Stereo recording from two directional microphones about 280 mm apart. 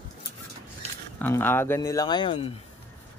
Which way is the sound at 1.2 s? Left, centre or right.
Centre.